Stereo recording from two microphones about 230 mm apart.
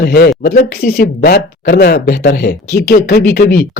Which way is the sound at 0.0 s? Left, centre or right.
Left.